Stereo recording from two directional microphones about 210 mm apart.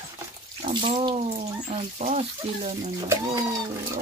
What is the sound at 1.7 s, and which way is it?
Speech, 30° right (ahead or behind).